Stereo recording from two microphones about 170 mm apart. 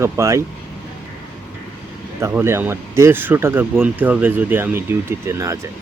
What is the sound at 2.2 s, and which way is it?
Speech, 15° right (ahead or behind).